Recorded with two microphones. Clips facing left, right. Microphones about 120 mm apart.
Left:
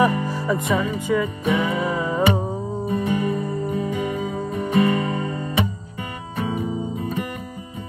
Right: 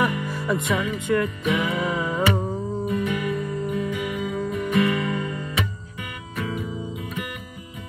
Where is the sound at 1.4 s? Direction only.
30° left (ahead or behind).